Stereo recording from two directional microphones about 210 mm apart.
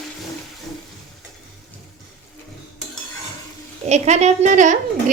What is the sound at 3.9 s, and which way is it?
Speech, 30° right (ahead or behind).